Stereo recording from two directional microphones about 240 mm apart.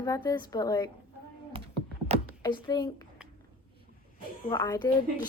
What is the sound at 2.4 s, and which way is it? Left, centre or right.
Speech, centre.